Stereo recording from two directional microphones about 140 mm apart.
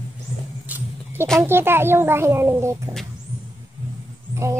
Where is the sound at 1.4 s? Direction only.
15° right (ahead or behind).